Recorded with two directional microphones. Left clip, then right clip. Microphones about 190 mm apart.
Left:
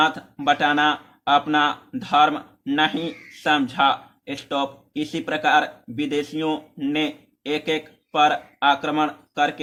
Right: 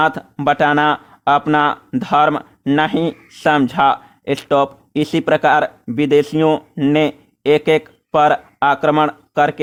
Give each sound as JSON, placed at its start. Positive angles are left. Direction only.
{"t": 0.0, "sound": "speech", "side_deg": -45}